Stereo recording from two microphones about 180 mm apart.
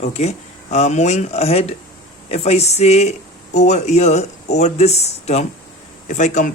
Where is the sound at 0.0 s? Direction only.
35° left (ahead or behind).